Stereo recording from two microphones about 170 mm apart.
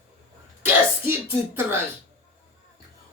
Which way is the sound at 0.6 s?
10° right (ahead or behind).